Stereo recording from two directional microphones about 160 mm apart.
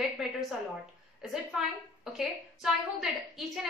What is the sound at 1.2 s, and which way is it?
A woman's voice, 5° right (ahead or behind).